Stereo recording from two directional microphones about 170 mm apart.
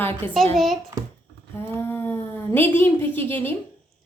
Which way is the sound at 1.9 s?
10° left (ahead or behind).